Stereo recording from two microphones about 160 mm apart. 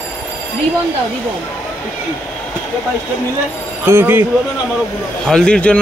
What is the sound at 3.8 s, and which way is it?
Speech, 15° right (ahead or behind).